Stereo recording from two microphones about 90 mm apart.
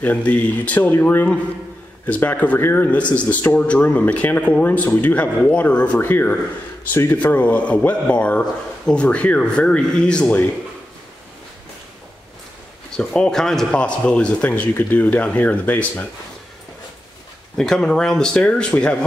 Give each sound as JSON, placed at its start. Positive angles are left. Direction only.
{"t": 0.0, "sound": "a man's voice", "side_deg": 15}
{"t": 12.9, "sound": "a man's voice", "side_deg": 10}
{"t": 17.6, "sound": "a man's voice", "side_deg": 5}